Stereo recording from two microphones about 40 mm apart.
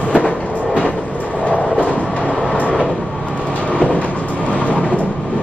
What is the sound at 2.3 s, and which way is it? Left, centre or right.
Vehicle, centre.